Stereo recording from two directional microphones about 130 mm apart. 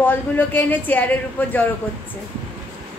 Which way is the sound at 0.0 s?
15° left (ahead or behind).